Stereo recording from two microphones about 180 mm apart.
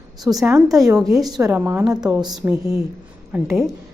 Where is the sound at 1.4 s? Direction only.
10° right (ahead or behind).